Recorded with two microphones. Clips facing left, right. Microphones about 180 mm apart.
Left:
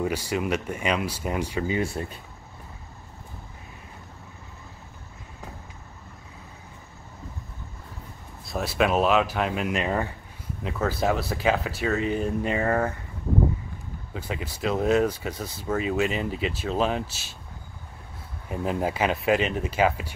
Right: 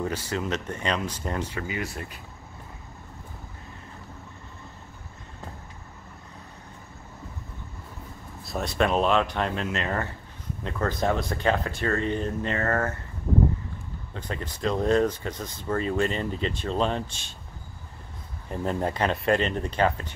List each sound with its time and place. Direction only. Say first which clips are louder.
0.0 s speech: left 3 dB; 10° left (ahead or behind)
1.7 s speech: left 6 dB; 30° left (ahead or behind)
8.5 s speech: left 1 dB; 5° left (ahead or behind)
14.1 s speech: left 1 dB; 10° left (ahead or behind)
18.5 s speech: left 1 dB; 5° left (ahead or behind)